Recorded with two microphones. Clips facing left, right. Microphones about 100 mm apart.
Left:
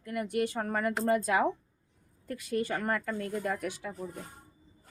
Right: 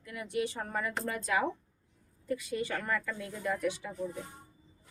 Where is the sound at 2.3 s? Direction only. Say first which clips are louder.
Left 2 dB; 55° left (ahead or behind).